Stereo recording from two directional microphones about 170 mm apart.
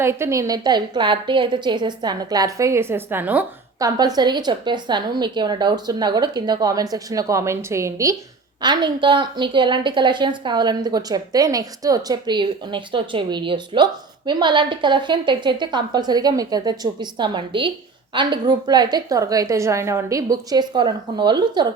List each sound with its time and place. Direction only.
0.0 s a woman's voice: 15° right (ahead or behind)
3.8 s a woman's voice: 20° right (ahead or behind)